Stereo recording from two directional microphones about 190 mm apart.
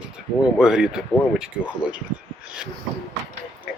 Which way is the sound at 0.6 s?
5° right (ahead or behind).